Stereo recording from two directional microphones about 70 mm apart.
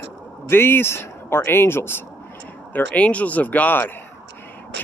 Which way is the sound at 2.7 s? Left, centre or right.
Centre.